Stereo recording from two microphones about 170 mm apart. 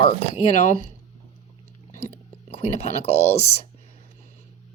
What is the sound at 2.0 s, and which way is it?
Speech, 35° left (ahead or behind).